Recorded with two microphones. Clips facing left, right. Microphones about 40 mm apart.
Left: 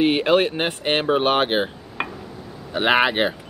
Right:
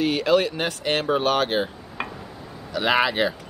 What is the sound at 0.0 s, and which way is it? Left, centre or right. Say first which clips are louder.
Speech: left 3 dB; left.